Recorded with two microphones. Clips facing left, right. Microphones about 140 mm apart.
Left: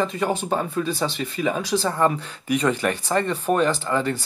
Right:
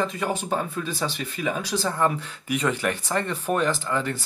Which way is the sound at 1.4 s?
25° left (ahead or behind).